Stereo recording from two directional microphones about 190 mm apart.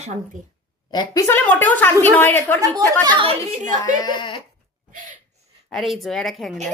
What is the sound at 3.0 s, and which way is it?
Speech, 25° right (ahead or behind).